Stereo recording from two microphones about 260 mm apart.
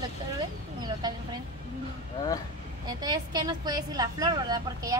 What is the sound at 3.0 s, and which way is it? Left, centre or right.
Speech, centre.